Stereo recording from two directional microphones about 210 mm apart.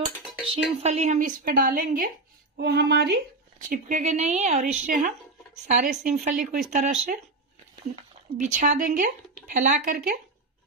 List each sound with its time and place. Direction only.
0.8 s speech: 35° right (ahead or behind)